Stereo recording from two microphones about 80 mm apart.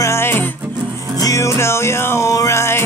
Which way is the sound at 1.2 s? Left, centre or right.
Left.